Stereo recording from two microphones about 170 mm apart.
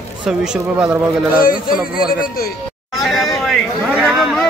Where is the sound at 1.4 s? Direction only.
55° left (ahead or behind).